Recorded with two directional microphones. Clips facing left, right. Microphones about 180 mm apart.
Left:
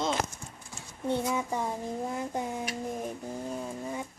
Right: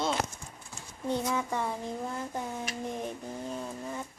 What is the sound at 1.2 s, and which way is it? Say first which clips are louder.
Speech: left 1 dB; 10° left (ahead or behind).